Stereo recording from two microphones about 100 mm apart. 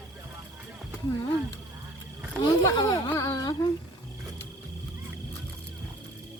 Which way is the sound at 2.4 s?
40° left (ahead or behind).